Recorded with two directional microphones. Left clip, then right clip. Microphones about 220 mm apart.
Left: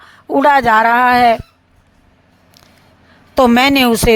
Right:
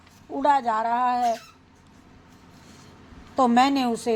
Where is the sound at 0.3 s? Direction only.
55° left (ahead or behind).